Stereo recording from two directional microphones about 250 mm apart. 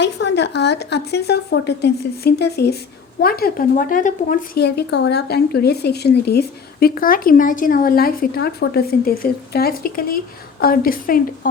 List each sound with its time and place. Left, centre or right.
0.0 s speech: left